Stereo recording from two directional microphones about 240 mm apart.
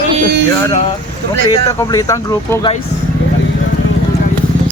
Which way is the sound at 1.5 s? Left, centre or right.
Centre.